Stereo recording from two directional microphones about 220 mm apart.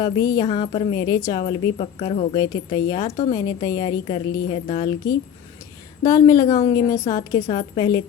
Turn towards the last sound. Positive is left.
turn(degrees=20)  # may be behind; listen again after turning